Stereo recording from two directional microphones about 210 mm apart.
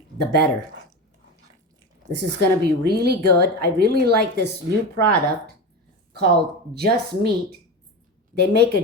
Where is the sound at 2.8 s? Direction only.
50° right (ahead or behind).